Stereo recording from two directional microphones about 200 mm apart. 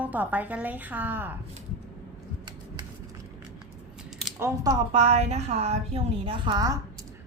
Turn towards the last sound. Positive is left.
turn(degrees=-20)  # may be behind; listen again after turning